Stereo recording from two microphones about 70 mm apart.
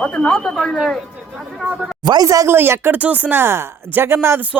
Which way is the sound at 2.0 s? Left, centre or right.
Right.